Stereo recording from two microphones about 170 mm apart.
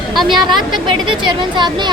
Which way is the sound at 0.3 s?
30° right (ahead or behind).